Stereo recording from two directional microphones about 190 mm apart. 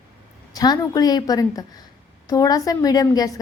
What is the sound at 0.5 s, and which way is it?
A woman's voice, 20° left (ahead or behind).